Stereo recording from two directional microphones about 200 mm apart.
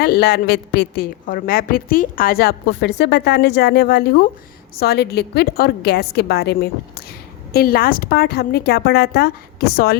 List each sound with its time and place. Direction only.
0.0 s a woman's voice: 55° left (ahead or behind)